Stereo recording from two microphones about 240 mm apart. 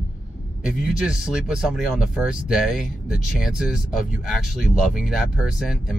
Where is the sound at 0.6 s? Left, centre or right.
Centre.